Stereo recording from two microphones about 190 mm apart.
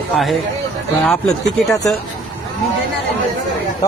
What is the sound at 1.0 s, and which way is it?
Speech, 5° left (ahead or behind).